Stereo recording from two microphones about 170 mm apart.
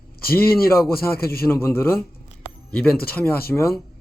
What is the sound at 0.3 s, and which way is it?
Speech, 60° left (ahead or behind).